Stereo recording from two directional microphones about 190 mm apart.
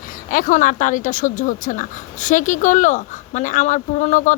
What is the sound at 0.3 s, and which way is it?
Speech, 45° left (ahead or behind).